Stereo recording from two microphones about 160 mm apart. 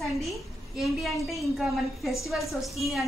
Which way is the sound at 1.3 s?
Centre (ahead or behind).